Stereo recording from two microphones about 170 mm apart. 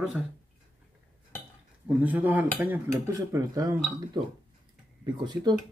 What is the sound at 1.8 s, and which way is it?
Speech, 10° right (ahead or behind).